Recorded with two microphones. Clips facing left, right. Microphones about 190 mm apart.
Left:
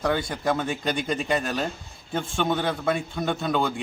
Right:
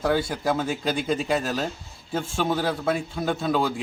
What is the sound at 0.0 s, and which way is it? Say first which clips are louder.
A man's voice: right 1 dB; 5° right (ahead or behind).